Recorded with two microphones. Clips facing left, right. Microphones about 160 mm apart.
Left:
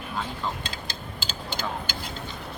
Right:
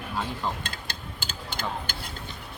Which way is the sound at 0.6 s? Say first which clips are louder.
Left 2 dB; 55° right (ahead or behind).